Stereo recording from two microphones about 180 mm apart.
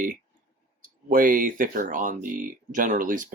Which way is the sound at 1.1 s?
50° right (ahead or behind).